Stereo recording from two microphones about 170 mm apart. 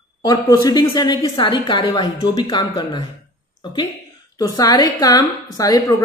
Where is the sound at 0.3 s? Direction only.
20° left (ahead or behind).